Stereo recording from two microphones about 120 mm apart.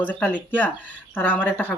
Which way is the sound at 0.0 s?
15° left (ahead or behind).